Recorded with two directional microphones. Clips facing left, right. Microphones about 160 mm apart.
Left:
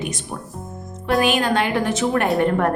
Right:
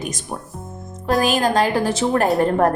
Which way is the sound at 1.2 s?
40° right (ahead or behind).